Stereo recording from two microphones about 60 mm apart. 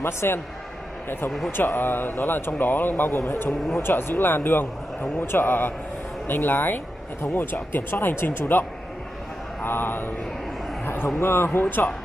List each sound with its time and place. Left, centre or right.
0.0 s a man's voice: left
1.6 s speech: left
3.1 s a man's voice: left
3.7 s speech: left